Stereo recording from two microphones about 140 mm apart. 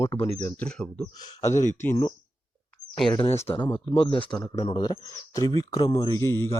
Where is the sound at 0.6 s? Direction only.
10° left (ahead or behind).